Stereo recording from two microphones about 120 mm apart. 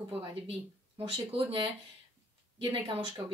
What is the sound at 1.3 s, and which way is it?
Speech, 45° right (ahead or behind).